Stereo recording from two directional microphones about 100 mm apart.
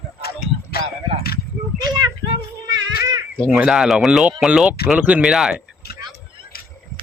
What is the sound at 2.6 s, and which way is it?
Music, 35° right (ahead or behind).